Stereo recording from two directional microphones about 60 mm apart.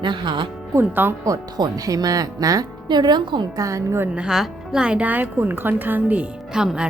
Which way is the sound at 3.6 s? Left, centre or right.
Right.